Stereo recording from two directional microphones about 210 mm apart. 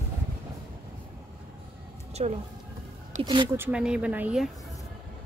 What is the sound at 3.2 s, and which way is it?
Speech, 20° right (ahead or behind).